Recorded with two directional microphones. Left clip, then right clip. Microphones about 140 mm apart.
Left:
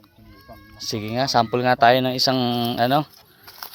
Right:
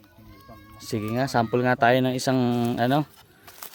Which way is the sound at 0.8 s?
30° right (ahead or behind).